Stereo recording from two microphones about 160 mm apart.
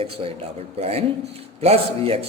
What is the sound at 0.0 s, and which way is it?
A man's voice, 35° right (ahead or behind).